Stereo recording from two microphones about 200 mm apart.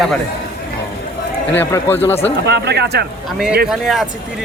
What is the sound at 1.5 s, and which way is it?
Speech, 10° left (ahead or behind).